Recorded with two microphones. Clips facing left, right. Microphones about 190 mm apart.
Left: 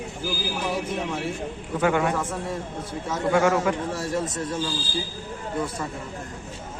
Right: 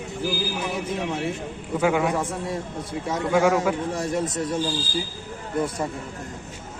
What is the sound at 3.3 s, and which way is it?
Speech, 5° right (ahead or behind).